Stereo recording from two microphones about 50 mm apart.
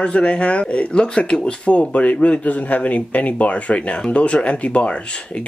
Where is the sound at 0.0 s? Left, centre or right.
Left.